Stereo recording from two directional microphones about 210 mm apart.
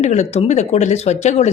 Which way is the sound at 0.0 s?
35° left (ahead or behind).